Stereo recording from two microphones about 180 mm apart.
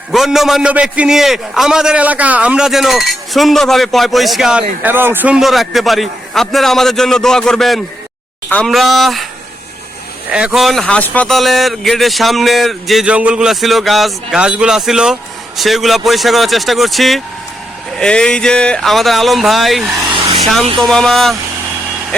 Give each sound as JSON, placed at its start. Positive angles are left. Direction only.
{"t": 0.1, "sound": "speech", "side_deg": 0}
{"t": 10.3, "sound": "speech", "side_deg": -5}
{"t": 20.0, "sound": "vehicle", "side_deg": -25}
{"t": 20.4, "sound": "speech", "side_deg": 0}